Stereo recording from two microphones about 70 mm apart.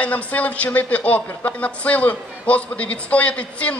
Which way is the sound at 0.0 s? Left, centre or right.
Left.